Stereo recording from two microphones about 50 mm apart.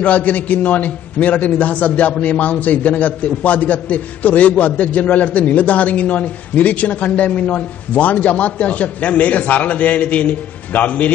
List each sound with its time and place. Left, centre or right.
0.0 s a man's voice: left